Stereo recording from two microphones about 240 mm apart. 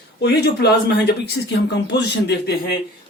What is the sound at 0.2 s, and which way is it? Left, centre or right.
Speech, left.